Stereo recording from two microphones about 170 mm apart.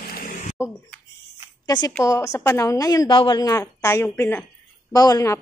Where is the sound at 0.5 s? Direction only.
15° left (ahead or behind).